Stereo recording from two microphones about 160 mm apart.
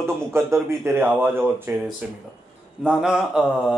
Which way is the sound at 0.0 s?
15° right (ahead or behind).